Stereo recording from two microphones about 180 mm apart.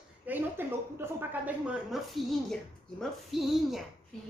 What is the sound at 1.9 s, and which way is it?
A woman's voice, centre (ahead or behind).